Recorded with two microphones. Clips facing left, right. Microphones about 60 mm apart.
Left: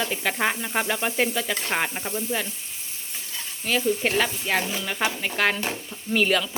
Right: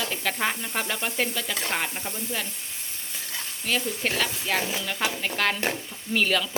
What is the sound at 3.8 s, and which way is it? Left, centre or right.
Speech, centre.